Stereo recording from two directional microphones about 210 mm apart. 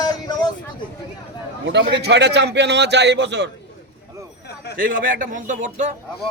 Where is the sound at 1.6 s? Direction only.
55° right (ahead or behind).